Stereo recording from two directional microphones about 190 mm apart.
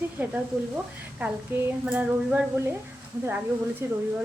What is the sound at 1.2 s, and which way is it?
A woman's voice, 10° right (ahead or behind).